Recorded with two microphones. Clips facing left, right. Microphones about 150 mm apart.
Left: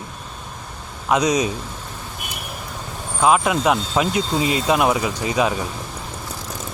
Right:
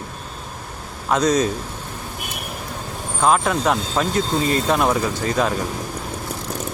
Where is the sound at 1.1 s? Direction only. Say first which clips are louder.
Even; 10° left (ahead or behind).